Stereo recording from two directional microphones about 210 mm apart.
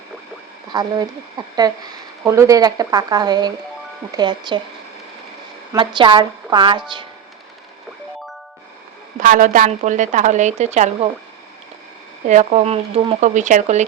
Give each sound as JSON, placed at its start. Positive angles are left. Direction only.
{"t": 0.7, "sound": "a woman's voice", "side_deg": -20}
{"t": 5.7, "sound": "a woman's voice", "side_deg": -20}
{"t": 9.2, "sound": "speech", "side_deg": -40}
{"t": 12.2, "sound": "speech", "side_deg": -35}